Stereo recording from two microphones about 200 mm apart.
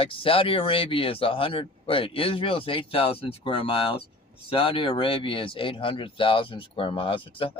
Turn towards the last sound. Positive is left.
turn(degrees=25)  # may be behind; listen again after turning